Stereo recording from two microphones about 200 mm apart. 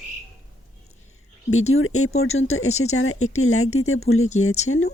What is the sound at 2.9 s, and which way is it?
Speech, 90° left.